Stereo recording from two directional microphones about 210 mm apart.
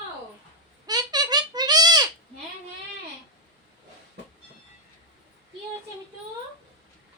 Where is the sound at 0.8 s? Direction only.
20° right (ahead or behind).